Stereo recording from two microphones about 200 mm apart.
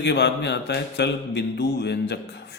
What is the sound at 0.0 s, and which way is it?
A man's voice, 55° left (ahead or behind).